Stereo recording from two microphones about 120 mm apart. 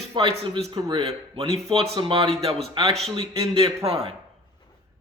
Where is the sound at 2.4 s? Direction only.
55° right (ahead or behind).